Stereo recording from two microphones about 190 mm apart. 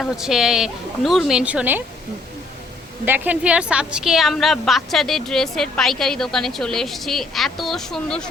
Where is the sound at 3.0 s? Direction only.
10° right (ahead or behind).